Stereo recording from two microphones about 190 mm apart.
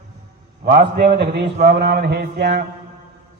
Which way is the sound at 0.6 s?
55° right (ahead or behind).